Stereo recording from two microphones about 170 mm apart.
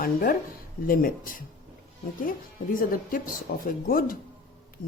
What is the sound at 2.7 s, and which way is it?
Speech, 55° left (ahead or behind).